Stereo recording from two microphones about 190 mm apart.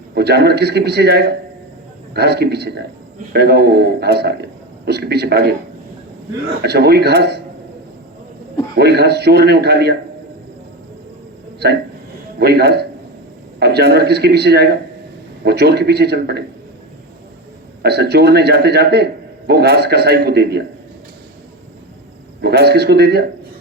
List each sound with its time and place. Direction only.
0.1 s a man's voice: 60° right (ahead or behind)
6.6 s a man's voice: 60° right (ahead or behind)
8.7 s a man's voice: 60° right (ahead or behind)
11.6 s a man's voice: 60° right (ahead or behind)
17.8 s a man's voice: 60° right (ahead or behind)
22.4 s a man's voice: 60° right (ahead or behind)